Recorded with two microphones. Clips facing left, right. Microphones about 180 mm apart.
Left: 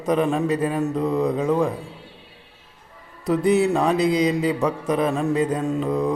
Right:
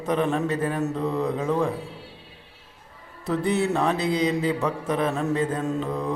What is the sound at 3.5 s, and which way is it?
Mantra, 15° left (ahead or behind).